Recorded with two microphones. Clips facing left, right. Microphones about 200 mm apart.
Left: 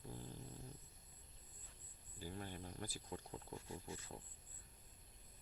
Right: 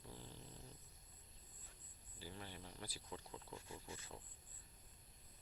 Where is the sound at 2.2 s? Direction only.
45° left (ahead or behind).